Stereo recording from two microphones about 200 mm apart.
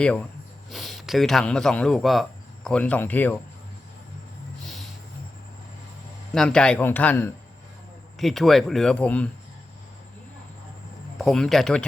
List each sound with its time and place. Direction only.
0.0 s speech: 5° left (ahead or behind)
6.3 s speech: 5° left (ahead or behind)
11.2 s speech: centre (ahead or behind)